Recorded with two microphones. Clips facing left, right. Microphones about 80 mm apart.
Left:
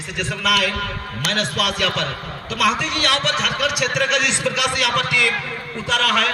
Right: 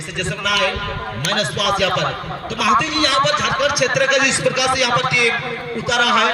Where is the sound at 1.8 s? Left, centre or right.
Centre.